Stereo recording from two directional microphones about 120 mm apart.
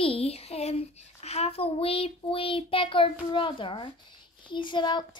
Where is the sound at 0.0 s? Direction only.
55° left (ahead or behind).